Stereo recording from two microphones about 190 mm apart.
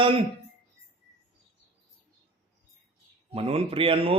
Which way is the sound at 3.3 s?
30° right (ahead or behind).